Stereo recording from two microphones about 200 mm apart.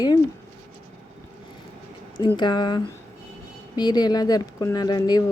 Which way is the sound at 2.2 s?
20° left (ahead or behind).